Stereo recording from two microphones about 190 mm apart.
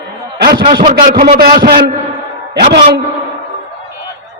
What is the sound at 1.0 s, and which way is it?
Speech, 50° right (ahead or behind).